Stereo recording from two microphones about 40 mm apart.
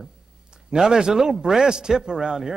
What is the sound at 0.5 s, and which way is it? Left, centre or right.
A man's voice, centre.